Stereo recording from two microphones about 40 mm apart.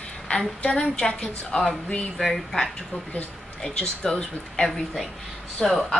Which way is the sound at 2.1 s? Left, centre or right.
Centre.